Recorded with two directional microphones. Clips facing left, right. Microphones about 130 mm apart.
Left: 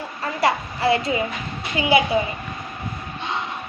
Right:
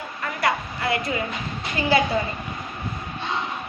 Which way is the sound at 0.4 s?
25° left (ahead or behind).